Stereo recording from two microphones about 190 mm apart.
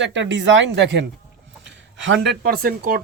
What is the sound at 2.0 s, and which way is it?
Speech, 70° right (ahead or behind).